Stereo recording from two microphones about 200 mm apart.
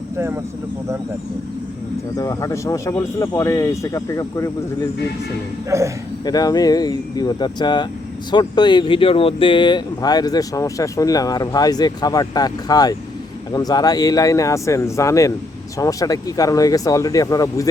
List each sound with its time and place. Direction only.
2.1 s speech: 15° left (ahead or behind)
5.7 s a man's voice: 15° right (ahead or behind)
6.2 s speech: 20° left (ahead or behind)